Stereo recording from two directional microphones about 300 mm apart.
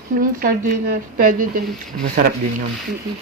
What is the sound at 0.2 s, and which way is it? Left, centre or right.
Speech, right.